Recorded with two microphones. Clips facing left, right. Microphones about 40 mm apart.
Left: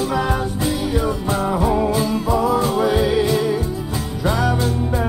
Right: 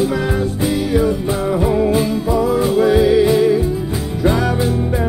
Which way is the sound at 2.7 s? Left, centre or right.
Centre.